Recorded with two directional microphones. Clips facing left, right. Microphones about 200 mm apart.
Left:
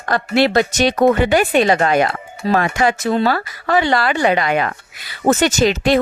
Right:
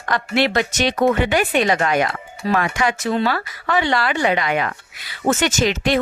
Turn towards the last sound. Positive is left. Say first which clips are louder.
# left 4 dB
turn(degrees=35)  # may be behind; listen again after turning